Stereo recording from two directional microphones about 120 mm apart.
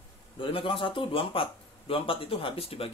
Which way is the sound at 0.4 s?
45° left (ahead or behind).